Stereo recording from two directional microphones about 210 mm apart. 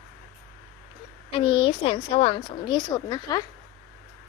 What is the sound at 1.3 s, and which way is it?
A woman's voice, 25° left (ahead or behind).